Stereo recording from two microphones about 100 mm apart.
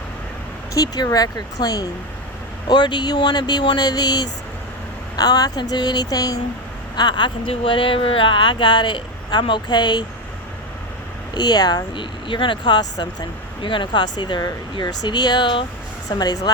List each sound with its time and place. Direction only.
0.7 s speech: 35° left (ahead or behind)
7.5 s speech: 65° left (ahead or behind); by 10.1 s 45° left (ahead or behind)
11.3 s speech: 45° left (ahead or behind)